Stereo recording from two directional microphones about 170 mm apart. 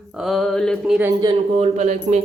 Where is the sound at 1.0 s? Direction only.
15° right (ahead or behind).